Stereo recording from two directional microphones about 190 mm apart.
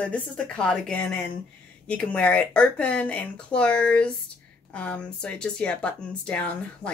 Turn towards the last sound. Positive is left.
turn(degrees=5)  # may be behind; listen again after turning